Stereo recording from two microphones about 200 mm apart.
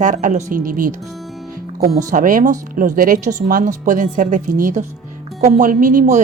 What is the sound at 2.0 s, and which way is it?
A woman's voice, 40° right (ahead or behind).